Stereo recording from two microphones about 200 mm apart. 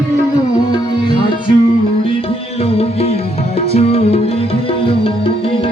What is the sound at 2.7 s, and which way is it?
Music, 30° left (ahead or behind).